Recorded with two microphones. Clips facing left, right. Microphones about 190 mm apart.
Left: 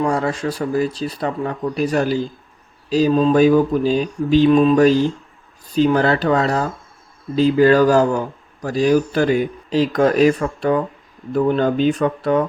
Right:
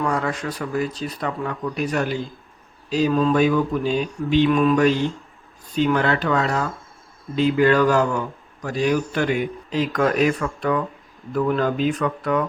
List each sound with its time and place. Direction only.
0.0 s speech: 30° left (ahead or behind)